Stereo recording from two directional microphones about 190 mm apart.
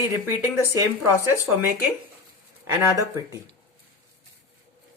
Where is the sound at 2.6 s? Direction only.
15° right (ahead or behind).